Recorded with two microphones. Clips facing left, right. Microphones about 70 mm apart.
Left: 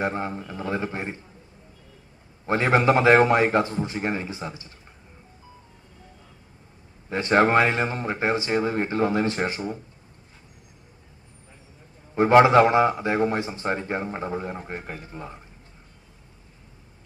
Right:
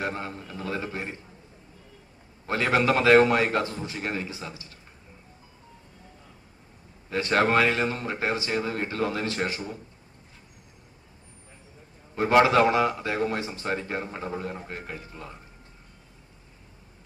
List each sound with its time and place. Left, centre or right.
0.0 s a man's voice: left
2.5 s a man's voice: left
7.1 s a man's voice: left
12.1 s a man's voice: left